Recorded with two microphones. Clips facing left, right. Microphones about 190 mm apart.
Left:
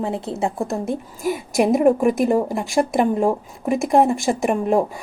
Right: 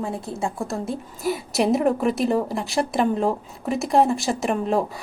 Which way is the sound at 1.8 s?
15° left (ahead or behind).